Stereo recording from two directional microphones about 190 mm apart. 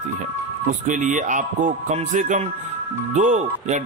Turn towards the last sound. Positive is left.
turn(degrees=-40)  # may be behind; listen again after turning